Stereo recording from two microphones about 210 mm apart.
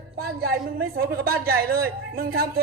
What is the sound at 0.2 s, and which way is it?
A man's voice, 45° right (ahead or behind).